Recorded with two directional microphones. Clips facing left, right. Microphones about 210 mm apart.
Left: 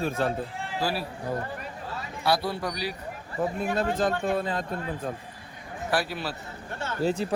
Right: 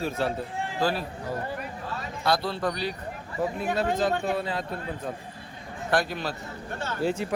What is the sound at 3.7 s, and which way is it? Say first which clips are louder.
Speech: right 1 dB; 50° left (ahead or behind).